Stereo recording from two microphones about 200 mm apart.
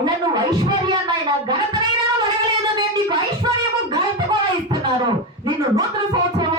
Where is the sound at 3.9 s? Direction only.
20° right (ahead or behind).